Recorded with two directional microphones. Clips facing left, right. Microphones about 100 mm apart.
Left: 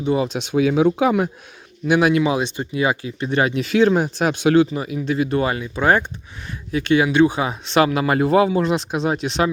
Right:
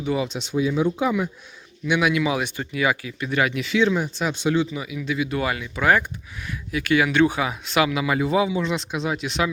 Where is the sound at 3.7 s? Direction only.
50° left (ahead or behind).